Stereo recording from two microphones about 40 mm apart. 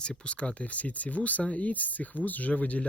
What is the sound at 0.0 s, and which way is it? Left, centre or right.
Speech, left.